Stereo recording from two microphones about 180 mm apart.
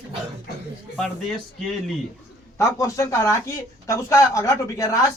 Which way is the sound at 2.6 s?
15° left (ahead or behind).